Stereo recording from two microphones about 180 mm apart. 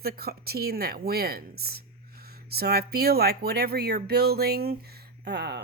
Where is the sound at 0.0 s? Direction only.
60° right (ahead or behind).